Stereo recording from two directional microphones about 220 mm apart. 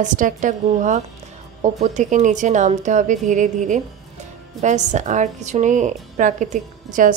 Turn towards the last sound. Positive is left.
turn(degrees=-35)  # may be behind; listen again after turning